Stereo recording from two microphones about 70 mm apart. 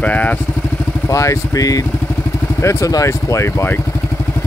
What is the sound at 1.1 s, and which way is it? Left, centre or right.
Speech, left.